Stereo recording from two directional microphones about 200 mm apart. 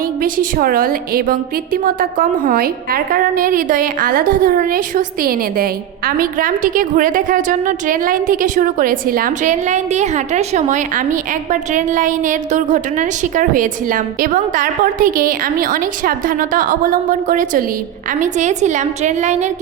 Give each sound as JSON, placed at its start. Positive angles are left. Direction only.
{"t": 0.2, "sound": "a woman's voice", "side_deg": -45}